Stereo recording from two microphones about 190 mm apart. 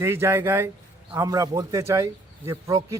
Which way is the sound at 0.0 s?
15° right (ahead or behind).